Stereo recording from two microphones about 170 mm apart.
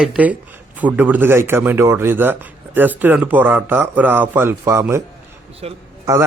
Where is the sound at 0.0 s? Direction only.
5° right (ahead or behind).